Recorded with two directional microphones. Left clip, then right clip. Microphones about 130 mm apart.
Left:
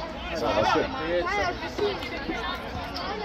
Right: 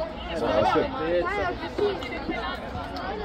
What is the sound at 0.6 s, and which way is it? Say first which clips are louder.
Speech: right 1 dB; 40° right (ahead or behind).